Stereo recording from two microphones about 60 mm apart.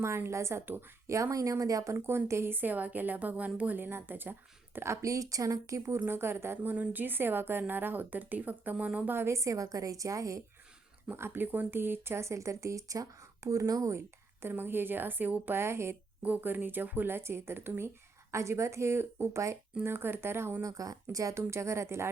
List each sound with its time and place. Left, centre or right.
0.3 s speech: right
0.6 s a woman's voice: right
1.0 s speech: right
2.0 s speech: right
2.5 s a woman's voice: right
4.9 s speech: right
6.1 s a woman's voice: right
6.6 s a woman's voice: right
9.1 s speech: right
11.1 s speech: right
14.4 s a woman's voice: right
16.2 s speech: right
19.8 s a woman's voice: right
20.6 s speech: right